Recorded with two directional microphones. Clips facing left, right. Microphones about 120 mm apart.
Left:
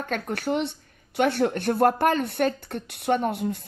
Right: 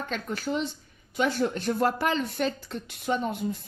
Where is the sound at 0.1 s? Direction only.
60° left (ahead or behind).